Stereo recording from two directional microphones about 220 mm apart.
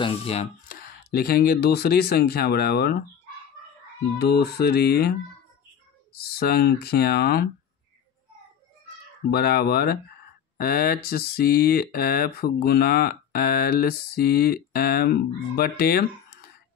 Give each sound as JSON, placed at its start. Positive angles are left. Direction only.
{"t": 0.0, "sound": "speech", "side_deg": 25}
{"t": 0.7, "sound": "speech", "side_deg": 40}
{"t": 4.2, "sound": "speech", "side_deg": 45}
{"t": 6.1, "sound": "speech", "side_deg": 45}
{"t": 9.3, "sound": "speech", "side_deg": 45}